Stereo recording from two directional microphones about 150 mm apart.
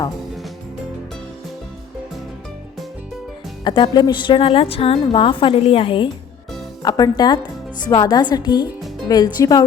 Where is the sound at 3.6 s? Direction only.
30° left (ahead or behind).